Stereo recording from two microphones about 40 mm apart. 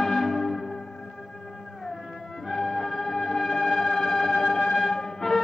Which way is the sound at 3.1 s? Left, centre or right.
Left.